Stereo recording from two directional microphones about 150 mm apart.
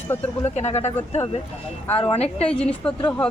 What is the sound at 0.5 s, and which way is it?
Speech, 45° left (ahead or behind).